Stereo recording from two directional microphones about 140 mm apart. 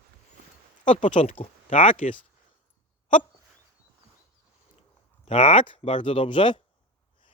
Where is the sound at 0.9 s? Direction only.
60° left (ahead or behind).